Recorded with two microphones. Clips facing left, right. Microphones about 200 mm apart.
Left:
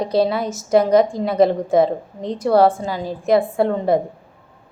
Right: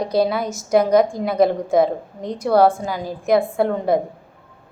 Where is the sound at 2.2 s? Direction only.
25° left (ahead or behind).